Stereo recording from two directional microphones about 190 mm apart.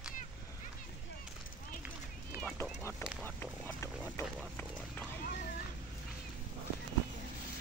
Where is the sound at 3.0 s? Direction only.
5° right (ahead or behind).